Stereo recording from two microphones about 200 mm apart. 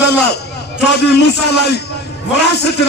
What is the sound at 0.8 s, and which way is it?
Speech, 55° left (ahead or behind).